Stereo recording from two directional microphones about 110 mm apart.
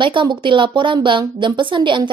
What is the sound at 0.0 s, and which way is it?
A woman's voice, 45° right (ahead or behind).